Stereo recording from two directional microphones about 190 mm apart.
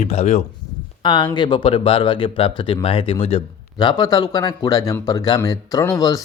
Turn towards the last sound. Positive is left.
turn(degrees=20)  # may be behind; listen again after turning